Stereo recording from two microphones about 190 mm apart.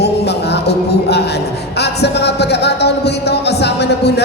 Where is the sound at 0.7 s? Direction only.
60° left (ahead or behind).